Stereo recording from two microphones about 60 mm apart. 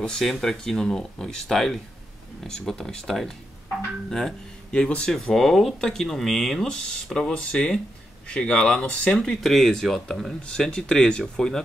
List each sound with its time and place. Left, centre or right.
0.0 s speech: centre
4.7 s speech: centre
5.1 s speech: centre